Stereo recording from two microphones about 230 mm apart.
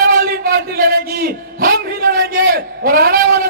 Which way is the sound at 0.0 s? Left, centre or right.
Right.